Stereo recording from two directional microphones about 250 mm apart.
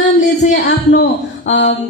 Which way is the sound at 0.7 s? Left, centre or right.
Left.